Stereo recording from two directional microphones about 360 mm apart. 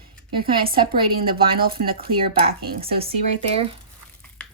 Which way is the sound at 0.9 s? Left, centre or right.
Right.